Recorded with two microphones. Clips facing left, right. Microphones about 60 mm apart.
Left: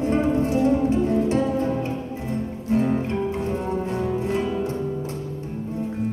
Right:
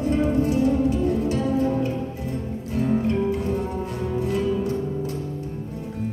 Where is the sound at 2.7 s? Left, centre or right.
Left.